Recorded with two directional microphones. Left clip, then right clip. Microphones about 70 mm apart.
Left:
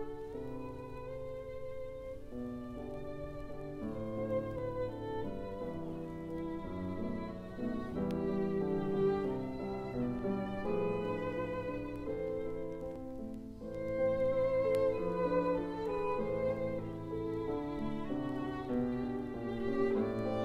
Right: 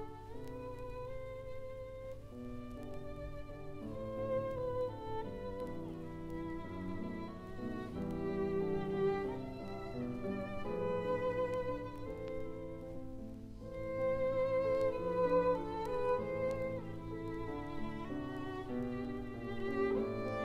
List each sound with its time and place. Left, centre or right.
6.3 s music: left
13.7 s music: left